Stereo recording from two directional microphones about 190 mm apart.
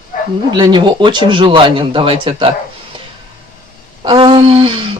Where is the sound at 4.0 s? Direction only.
25° right (ahead or behind).